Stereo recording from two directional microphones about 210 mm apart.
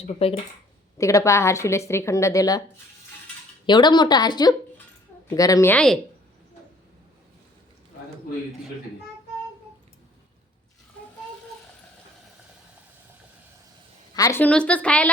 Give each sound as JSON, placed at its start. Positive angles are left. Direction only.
{"t": 0.0, "sound": "speech", "side_deg": 30}
{"t": 0.9, "sound": "a woman's voice", "side_deg": 15}
{"t": 3.7, "sound": "a woman's voice", "side_deg": 20}
{"t": 14.1, "sound": "a woman's voice", "side_deg": 15}